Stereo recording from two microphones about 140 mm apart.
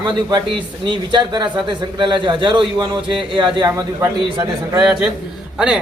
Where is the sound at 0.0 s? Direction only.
35° right (ahead or behind).